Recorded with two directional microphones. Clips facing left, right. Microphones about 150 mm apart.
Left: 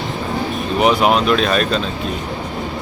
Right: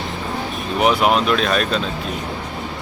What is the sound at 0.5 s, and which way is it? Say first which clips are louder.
Speech: left 2 dB; centre (ahead or behind).